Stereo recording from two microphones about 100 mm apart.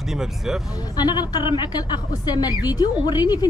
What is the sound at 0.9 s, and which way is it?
Speech, 45° left (ahead or behind).